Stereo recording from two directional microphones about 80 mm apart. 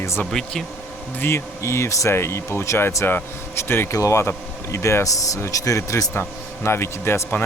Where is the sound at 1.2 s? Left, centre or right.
Left.